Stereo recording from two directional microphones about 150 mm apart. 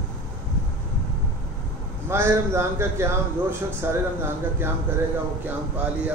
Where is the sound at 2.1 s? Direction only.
20° right (ahead or behind).